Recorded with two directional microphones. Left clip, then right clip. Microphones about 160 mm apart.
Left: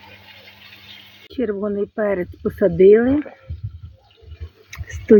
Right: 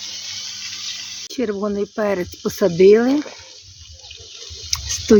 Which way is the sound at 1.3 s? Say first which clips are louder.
Even; 10° right (ahead or behind).